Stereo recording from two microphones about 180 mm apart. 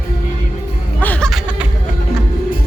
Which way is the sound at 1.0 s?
5° left (ahead or behind).